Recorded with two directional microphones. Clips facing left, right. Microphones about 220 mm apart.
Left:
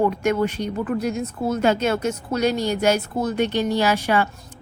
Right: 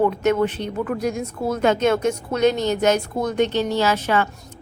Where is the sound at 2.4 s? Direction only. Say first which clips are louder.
Right 3 dB; 10° left (ahead or behind).